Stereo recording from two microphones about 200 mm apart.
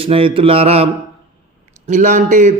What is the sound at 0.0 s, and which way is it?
Mantra, 25° right (ahead or behind).